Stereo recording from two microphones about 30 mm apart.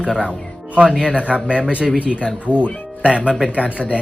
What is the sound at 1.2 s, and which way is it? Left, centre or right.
Speech, right.